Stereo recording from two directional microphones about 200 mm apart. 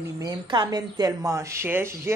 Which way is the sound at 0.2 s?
20° right (ahead or behind).